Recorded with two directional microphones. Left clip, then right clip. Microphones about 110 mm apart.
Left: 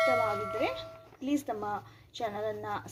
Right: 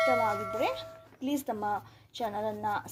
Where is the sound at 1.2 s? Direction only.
50° right (ahead or behind).